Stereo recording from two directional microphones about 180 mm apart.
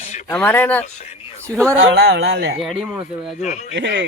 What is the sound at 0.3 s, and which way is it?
Speech, 10° left (ahead or behind).